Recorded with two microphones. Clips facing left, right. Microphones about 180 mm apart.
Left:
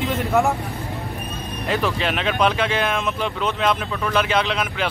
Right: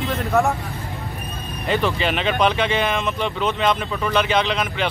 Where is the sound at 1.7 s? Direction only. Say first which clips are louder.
Right 2 dB; centre (ahead or behind).